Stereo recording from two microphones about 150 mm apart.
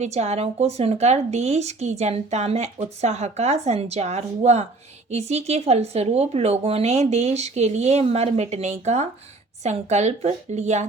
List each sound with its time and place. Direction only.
0.0 s speech: 45° right (ahead or behind)